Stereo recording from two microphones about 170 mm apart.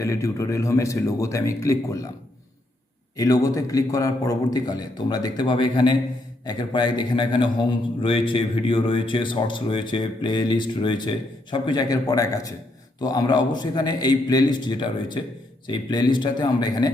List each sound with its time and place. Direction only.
0.0 s speech: 20° left (ahead or behind)
3.2 s speech: 20° left (ahead or behind)